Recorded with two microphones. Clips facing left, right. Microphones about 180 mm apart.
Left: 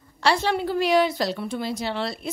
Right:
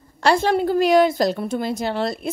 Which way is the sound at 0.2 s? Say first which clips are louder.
Right 5 dB; 45° right (ahead or behind).